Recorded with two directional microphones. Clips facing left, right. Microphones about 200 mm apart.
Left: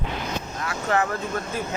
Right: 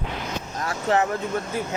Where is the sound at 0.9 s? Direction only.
25° right (ahead or behind).